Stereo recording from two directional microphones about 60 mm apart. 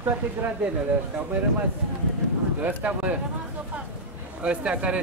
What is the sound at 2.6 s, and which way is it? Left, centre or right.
Speech, right.